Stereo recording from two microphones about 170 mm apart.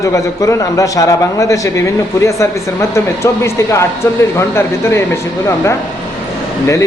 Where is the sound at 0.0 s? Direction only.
20° left (ahead or behind).